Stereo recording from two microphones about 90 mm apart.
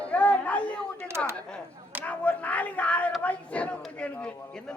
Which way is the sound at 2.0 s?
15° left (ahead or behind).